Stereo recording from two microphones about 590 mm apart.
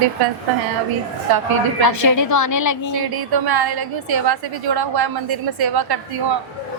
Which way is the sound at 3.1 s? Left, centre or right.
Right.